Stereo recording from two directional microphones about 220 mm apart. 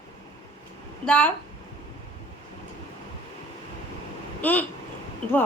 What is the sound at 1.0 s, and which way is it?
Speech, 5° left (ahead or behind).